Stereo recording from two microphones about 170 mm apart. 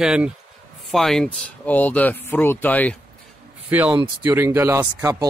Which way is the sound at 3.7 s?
10° right (ahead or behind).